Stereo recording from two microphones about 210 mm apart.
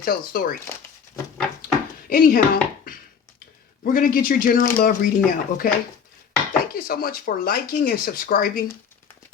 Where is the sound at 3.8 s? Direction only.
40° left (ahead or behind).